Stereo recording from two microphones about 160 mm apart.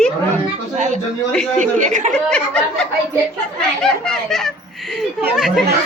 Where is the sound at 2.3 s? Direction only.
5° left (ahead or behind).